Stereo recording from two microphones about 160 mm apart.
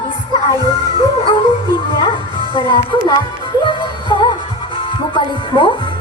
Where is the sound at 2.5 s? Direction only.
30° left (ahead or behind).